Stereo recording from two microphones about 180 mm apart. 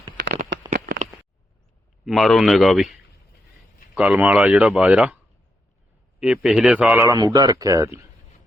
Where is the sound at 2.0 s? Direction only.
Centre (ahead or behind).